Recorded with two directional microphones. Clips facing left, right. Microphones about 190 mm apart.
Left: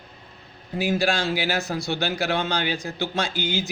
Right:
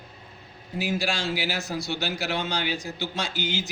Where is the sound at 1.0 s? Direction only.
55° left (ahead or behind).